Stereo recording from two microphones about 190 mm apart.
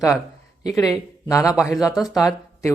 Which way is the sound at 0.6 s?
20° left (ahead or behind).